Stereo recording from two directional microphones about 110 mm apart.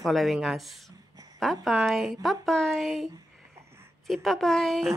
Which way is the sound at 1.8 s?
Centre (ahead or behind).